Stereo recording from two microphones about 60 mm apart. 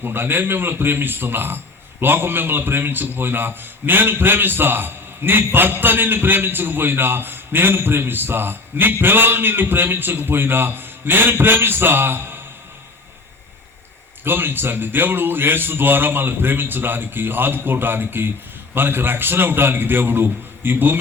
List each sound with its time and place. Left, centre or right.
0.0 s a man's voice: right
14.3 s a man's voice: right